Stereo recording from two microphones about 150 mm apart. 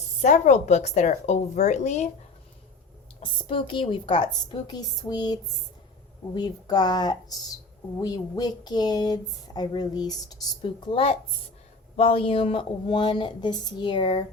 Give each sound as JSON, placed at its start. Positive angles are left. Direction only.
{"t": 0.2, "sound": "speech", "side_deg": 55}
{"t": 3.2, "sound": "a woman's voice", "side_deg": 35}